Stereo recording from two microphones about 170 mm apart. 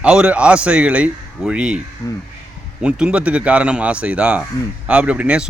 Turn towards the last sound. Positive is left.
turn(degrees=-5)  # may be behind; listen again after turning